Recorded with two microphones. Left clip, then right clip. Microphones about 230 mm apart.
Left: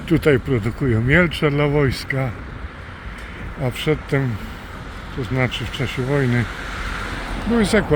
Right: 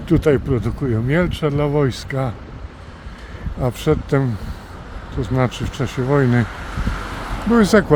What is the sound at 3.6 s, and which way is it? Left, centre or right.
Speech, right.